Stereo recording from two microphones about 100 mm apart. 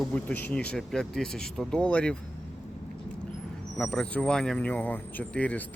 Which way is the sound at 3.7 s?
10° left (ahead or behind).